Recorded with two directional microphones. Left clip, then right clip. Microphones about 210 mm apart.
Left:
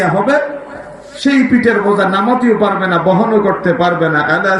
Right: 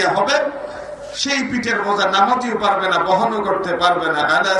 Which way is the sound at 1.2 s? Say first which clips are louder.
Left 9 dB; 25° left (ahead or behind).